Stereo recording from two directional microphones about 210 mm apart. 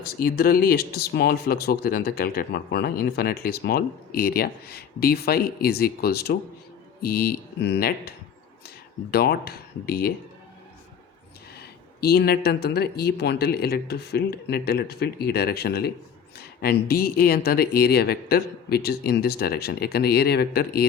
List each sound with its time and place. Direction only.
0.0 s speech: 45° left (ahead or behind)
11.6 s speech: 50° left (ahead or behind)